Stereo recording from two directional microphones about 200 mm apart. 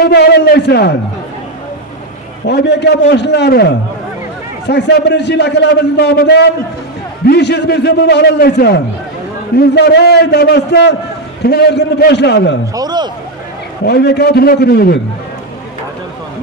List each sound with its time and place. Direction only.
0.0 s a man's voice: 55° left (ahead or behind)
2.4 s a man's voice: 60° left (ahead or behind)
12.7 s a man's voice: 20° right (ahead or behind)
13.8 s a man's voice: 55° left (ahead or behind)